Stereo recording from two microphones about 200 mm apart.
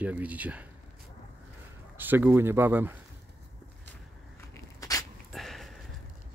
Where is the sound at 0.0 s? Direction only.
5° right (ahead or behind).